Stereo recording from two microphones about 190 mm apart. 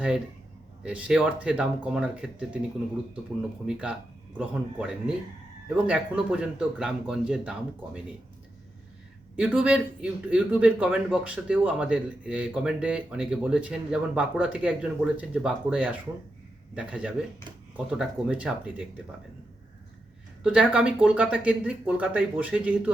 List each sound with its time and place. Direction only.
0.8 s a man's voice: 5° right (ahead or behind)
3.7 s a man's voice: 5° right (ahead or behind)
9.3 s a man's voice: 5° right (ahead or behind)
20.4 s speech: 5° right (ahead or behind)